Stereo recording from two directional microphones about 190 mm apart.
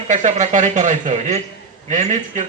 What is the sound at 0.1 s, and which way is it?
Speech, 40° right (ahead or behind).